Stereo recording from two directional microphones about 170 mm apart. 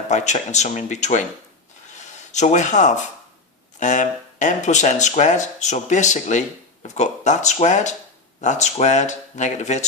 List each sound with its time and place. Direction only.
0.1 s speech: 45° left (ahead or behind)
2.3 s speech: 45° left (ahead or behind)